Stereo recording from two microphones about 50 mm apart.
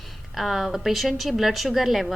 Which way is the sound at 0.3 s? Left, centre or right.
Centre.